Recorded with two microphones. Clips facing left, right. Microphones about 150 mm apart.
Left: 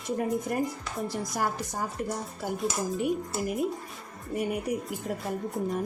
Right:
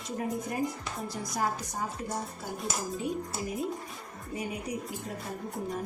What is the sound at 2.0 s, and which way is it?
Speech, 60° left (ahead or behind).